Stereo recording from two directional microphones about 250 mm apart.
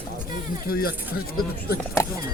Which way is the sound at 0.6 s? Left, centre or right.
Left.